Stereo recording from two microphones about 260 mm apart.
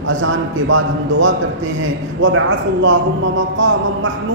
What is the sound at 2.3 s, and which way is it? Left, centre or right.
A man's voice, right.